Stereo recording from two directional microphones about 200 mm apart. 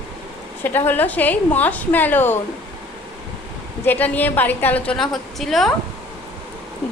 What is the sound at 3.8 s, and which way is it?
A woman's voice, 10° left (ahead or behind).